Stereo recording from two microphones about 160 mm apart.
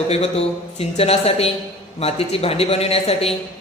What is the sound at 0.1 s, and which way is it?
A man's voice, 40° left (ahead or behind).